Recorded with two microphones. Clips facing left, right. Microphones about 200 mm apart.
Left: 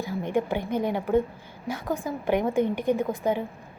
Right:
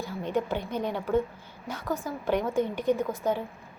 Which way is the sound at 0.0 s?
15° left (ahead or behind).